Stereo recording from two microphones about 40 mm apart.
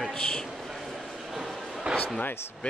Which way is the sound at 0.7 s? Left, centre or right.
Centre.